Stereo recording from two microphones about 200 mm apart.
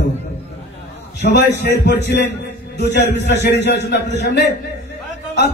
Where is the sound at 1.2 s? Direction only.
60° left (ahead or behind).